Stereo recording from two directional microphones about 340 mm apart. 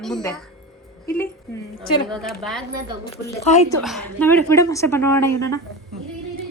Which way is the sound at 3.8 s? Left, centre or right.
Centre.